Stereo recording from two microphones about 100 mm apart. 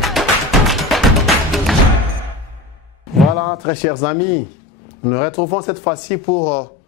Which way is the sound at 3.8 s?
20° left (ahead or behind).